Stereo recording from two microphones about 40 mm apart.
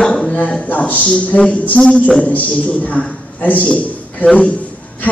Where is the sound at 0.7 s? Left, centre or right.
Left.